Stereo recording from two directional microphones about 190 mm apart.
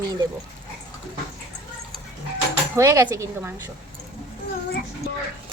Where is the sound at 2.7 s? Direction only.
15° right (ahead or behind).